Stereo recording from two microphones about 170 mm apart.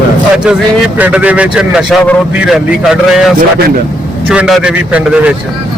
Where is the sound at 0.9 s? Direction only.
10° right (ahead or behind).